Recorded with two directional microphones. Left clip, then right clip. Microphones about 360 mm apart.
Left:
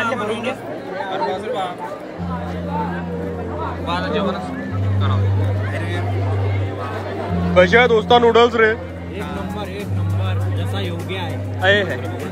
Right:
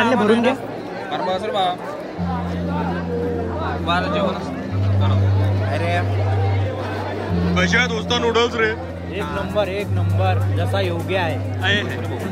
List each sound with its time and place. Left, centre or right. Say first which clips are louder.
0.0 s speech: right 5 dB; right
3.8 s speech: right 3 dB; right
7.5 s speech: left 7 dB; centre
10.8 s speech: right 6 dB; centre
11.6 s speech: left 5 dB; centre